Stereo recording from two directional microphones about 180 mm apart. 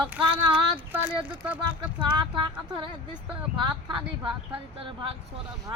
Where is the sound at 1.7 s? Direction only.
25° right (ahead or behind).